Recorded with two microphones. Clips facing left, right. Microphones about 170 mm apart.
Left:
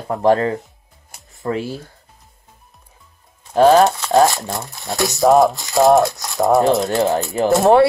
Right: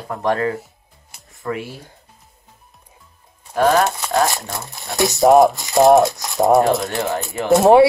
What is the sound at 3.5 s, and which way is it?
Speech, 30° left (ahead or behind).